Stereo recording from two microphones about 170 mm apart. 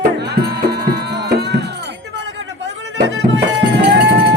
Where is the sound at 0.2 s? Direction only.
70° right (ahead or behind).